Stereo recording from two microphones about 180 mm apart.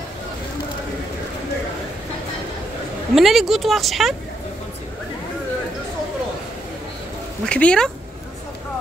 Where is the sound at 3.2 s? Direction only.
Centre (ahead or behind).